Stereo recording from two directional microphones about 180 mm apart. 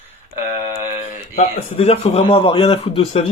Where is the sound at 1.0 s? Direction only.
35° left (ahead or behind).